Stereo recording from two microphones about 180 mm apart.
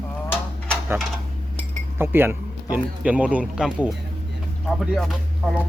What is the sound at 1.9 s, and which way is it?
Speech, 10° right (ahead or behind).